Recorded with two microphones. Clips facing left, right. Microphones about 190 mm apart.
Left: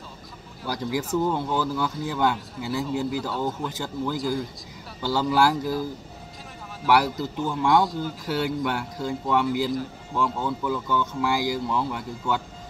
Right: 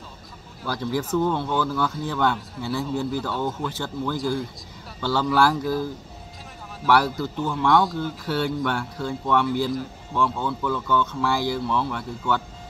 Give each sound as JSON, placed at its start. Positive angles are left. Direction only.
{"t": 0.8, "sound": "a man's voice", "side_deg": 10}
{"t": 5.0, "sound": "speech", "side_deg": 15}
{"t": 6.9, "sound": "speech", "side_deg": 15}
{"t": 7.3, "sound": "a man's voice", "side_deg": 0}